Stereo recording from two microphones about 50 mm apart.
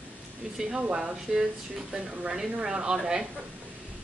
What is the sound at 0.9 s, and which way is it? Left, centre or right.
Speech, centre.